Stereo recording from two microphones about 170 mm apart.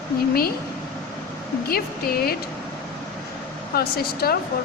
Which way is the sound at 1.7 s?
65° left (ahead or behind).